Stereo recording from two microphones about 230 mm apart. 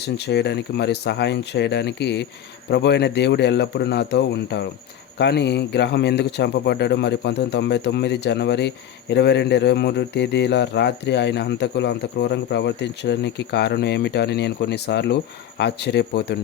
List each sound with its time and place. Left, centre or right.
0.0 s speech: left